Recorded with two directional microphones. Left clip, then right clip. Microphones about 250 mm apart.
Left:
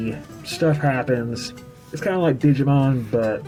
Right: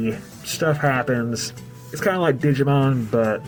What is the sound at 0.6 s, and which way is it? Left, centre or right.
Speech, right.